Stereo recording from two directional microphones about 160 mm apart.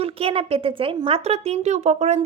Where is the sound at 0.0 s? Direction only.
35° right (ahead or behind).